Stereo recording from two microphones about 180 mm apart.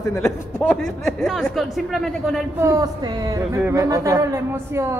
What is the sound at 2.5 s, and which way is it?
A woman's voice, 15° right (ahead or behind).